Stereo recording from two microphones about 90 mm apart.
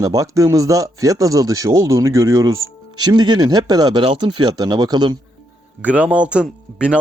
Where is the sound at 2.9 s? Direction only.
50° right (ahead or behind).